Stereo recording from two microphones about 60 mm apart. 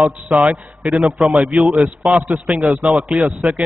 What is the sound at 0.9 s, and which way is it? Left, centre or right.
A man's voice, centre.